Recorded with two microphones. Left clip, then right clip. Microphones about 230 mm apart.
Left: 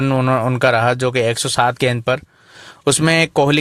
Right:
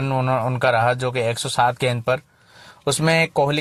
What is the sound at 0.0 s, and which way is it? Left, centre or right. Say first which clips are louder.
Speech: left 4 dB; left.